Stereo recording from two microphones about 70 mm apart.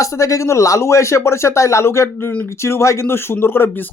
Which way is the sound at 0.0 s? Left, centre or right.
Left.